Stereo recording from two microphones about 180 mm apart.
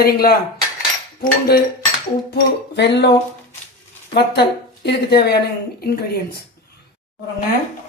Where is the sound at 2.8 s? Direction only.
70° left (ahead or behind).